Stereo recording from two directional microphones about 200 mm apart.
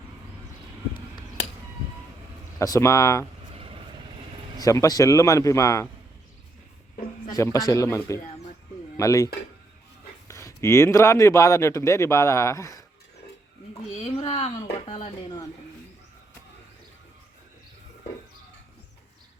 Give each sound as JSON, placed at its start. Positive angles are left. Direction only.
{"t": 2.6, "sound": "a man's voice", "side_deg": 15}
{"t": 3.5, "sound": "vehicle", "side_deg": -25}
{"t": 4.6, "sound": "a man's voice", "side_deg": 15}
{"t": 7.3, "sound": "a man's voice", "side_deg": 15}
{"t": 14.0, "sound": "speech", "side_deg": 35}